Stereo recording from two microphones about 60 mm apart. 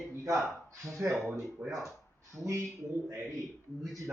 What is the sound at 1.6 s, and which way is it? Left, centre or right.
Speech, right.